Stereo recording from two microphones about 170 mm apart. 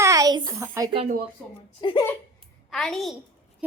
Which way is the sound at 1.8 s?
25° left (ahead or behind).